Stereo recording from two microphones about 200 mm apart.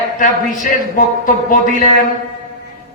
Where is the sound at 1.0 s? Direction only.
45° left (ahead or behind).